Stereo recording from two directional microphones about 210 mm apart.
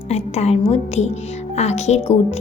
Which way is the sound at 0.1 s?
30° left (ahead or behind).